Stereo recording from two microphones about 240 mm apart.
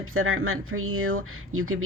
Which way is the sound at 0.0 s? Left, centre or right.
Right.